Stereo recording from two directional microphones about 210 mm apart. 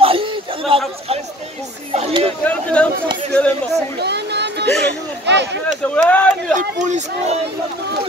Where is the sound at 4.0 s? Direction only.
55° right (ahead or behind).